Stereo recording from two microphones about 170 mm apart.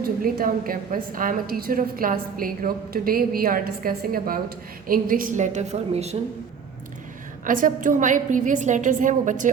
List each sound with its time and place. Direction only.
0.0 s a woman's voice: 60° right (ahead or behind); by 6.1 s 40° right (ahead or behind)
7.4 s a woman's voice: 50° right (ahead or behind)